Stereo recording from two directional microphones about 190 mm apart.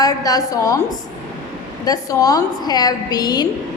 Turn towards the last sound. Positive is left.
turn(degrees=20)  # may be behind; listen again after turning